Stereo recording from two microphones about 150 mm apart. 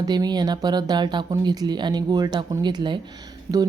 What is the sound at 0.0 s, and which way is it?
A woman's voice, 25° right (ahead or behind).